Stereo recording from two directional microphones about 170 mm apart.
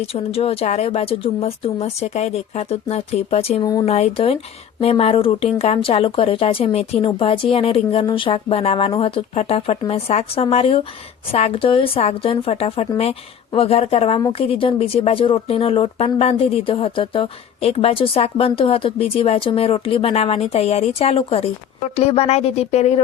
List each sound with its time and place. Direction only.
0.0 s speech: 35° left (ahead or behind)